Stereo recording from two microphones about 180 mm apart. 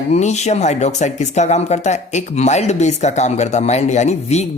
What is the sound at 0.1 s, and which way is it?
Speech, 40° left (ahead or behind).